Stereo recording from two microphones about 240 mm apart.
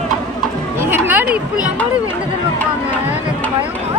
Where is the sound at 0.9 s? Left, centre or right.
Centre.